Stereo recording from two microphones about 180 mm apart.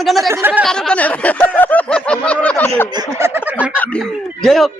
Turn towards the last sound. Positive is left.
turn(degrees=0)  # may be behind; listen again after turning